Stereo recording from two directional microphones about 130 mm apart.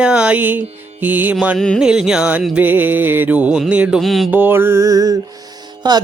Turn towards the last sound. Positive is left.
turn(degrees=-35)  # may be behind; listen again after turning